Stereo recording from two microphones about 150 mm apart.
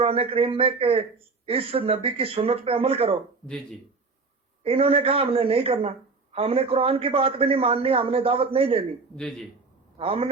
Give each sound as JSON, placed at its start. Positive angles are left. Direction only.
{"t": 0.0, "sound": "a man's voice", "side_deg": -40}
{"t": 4.6, "sound": "a man's voice", "side_deg": -40}
{"t": 9.1, "sound": "a man's voice", "side_deg": 5}
{"t": 10.0, "sound": "a man's voice", "side_deg": -40}